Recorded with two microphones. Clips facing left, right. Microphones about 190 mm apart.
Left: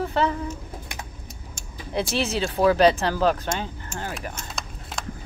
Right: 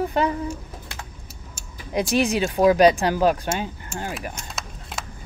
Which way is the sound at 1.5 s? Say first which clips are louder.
Right 2 dB; 5° right (ahead or behind).